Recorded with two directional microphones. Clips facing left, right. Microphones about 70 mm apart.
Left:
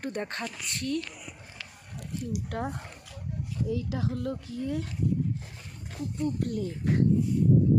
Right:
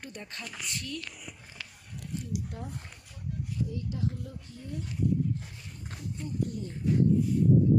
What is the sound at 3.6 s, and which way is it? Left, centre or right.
Speech, left.